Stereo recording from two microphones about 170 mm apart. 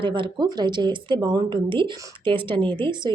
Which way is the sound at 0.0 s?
30° right (ahead or behind).